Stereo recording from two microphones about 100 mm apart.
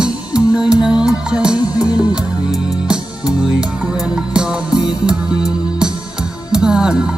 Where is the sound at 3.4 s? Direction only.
5° right (ahead or behind).